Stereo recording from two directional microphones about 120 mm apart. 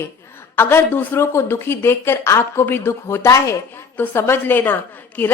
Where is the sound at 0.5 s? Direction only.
20° left (ahead or behind).